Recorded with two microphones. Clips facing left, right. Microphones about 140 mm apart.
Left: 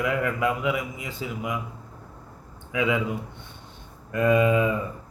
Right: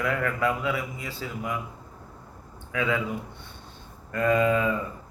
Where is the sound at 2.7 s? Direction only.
15° left (ahead or behind).